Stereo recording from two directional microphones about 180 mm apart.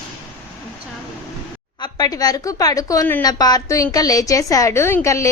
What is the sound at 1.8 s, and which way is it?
A woman's voice, 20° left (ahead or behind).